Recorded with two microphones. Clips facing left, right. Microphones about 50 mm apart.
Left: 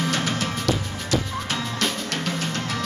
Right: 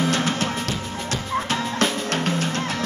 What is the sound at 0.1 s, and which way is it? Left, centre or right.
Music, right.